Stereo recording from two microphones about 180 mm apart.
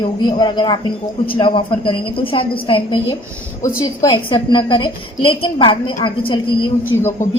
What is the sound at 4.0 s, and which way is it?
A woman's voice, 25° left (ahead or behind).